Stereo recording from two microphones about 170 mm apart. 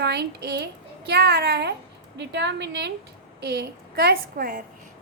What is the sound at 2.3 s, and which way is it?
Speech, 90° right.